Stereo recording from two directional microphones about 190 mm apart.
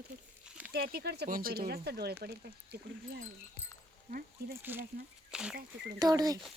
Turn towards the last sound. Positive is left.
turn(degrees=-20)  # may be behind; listen again after turning